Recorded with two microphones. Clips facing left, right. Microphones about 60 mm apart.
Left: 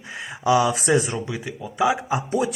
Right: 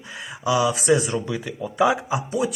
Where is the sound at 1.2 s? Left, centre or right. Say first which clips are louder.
Right 1 dB; centre.